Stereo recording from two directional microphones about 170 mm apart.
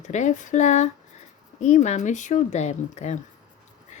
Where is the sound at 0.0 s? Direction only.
45° left (ahead or behind).